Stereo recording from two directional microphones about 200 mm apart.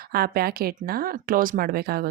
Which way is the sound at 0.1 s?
50° right (ahead or behind).